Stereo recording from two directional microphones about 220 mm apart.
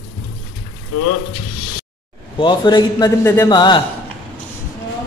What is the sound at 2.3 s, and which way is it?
A man's voice, 20° left (ahead or behind).